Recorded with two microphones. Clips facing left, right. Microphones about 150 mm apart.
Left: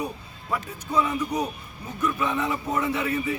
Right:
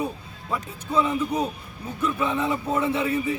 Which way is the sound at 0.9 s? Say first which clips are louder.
Right 2 dB; 30° right (ahead or behind).